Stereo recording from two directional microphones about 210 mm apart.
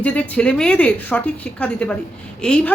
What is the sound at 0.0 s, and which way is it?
A woman's voice, 5° left (ahead or behind).